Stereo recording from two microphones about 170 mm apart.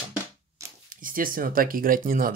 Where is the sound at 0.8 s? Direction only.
55° right (ahead or behind).